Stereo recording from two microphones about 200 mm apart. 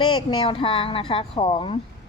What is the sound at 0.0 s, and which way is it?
A woman's voice, 20° left (ahead or behind).